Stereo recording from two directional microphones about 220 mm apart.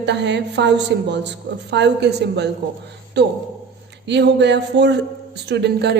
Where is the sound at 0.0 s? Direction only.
50° right (ahead or behind).